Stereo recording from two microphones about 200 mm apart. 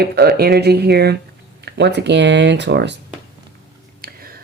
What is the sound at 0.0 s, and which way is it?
Speech, 50° right (ahead or behind).